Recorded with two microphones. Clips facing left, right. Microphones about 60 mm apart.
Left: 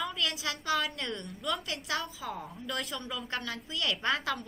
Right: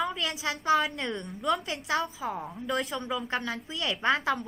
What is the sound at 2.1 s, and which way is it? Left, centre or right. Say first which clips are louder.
Speech: right 5 dB; right.